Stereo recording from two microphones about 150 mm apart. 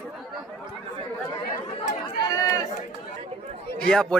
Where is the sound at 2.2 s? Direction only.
25° left (ahead or behind).